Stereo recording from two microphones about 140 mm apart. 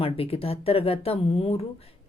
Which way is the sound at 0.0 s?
45° left (ahead or behind).